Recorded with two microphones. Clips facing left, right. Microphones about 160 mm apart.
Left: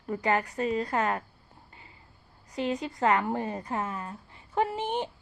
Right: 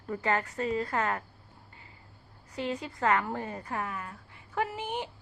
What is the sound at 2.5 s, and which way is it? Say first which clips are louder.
A woman's voice: left 4 dB; 20° left (ahead or behind).